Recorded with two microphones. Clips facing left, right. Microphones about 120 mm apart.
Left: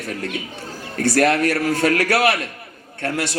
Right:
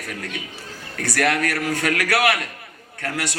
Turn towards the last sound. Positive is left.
turn(degrees=30)  # may be behind; listen again after turning